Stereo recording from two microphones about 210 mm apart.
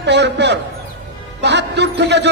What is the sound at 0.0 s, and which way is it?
A man's voice, 55° right (ahead or behind).